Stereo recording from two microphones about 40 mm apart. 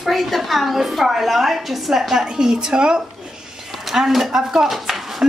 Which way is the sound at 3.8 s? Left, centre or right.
Centre.